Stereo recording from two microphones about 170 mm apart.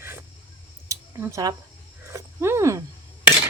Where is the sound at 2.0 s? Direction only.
15° right (ahead or behind).